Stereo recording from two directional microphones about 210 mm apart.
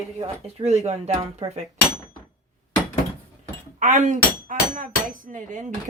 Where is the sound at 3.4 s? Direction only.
35° right (ahead or behind).